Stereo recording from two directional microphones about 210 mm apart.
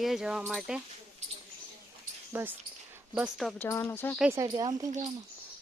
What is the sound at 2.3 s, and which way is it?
A woman's voice, 10° right (ahead or behind).